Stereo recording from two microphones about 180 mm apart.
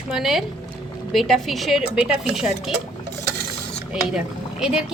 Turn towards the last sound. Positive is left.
turn(degrees=-5)  # may be behind; listen again after turning